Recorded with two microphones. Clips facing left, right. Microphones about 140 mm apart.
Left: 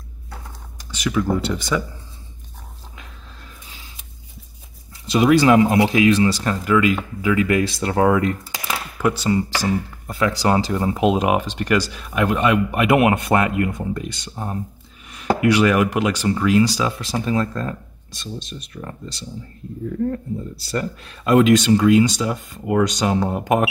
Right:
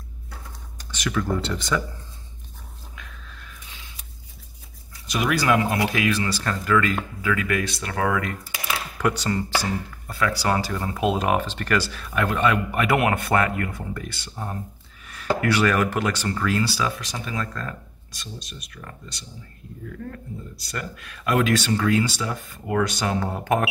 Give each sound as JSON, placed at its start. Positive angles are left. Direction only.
{"t": 0.7, "sound": "computer keyboard", "side_deg": 10}
{"t": 1.4, "sound": "speech", "side_deg": 5}
{"t": 5.0, "sound": "speech", "side_deg": 25}
{"t": 9.0, "sound": "speech", "side_deg": 10}